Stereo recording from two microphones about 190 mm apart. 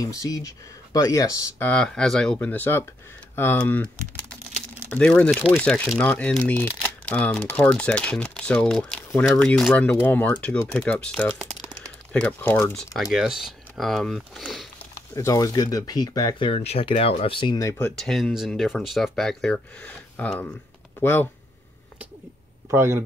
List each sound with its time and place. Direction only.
0.0 s speech: 20° left (ahead or behind); by 14.7 s centre (ahead or behind)
15.1 s speech: 15° left (ahead or behind)
17.9 s speech: centre (ahead or behind)
22.7 s speech: 15° right (ahead or behind)